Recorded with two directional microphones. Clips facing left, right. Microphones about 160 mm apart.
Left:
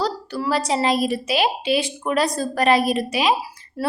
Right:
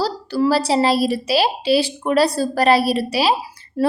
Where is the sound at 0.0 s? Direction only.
30° right (ahead or behind).